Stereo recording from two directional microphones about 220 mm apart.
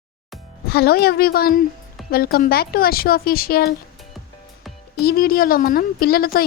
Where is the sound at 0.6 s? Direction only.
45° left (ahead or behind).